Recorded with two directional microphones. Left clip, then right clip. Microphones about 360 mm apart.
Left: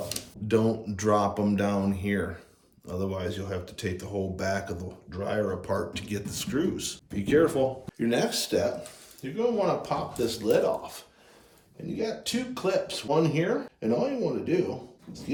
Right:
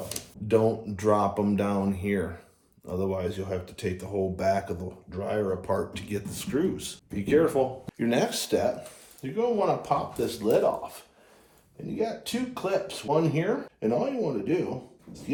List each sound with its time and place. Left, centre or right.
0.1 s speech: centre